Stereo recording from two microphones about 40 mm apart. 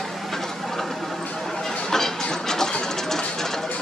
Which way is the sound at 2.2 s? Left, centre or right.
Centre.